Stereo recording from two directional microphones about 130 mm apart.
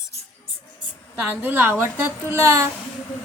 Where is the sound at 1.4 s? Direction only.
15° right (ahead or behind).